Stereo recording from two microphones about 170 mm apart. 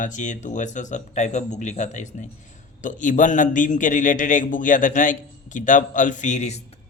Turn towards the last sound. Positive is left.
turn(degrees=45)  # may be behind; listen again after turning